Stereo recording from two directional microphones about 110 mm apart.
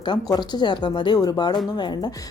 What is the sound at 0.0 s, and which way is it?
A woman's voice, 45° left (ahead or behind).